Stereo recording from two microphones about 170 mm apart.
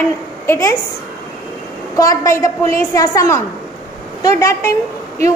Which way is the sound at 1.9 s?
20° left (ahead or behind).